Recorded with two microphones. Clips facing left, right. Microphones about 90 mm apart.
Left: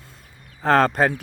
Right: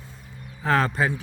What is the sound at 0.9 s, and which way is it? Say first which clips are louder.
Speech: left 4 dB; 55° left (ahead or behind).